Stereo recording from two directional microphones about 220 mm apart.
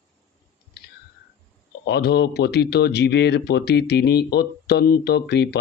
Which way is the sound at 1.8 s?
50° left (ahead or behind).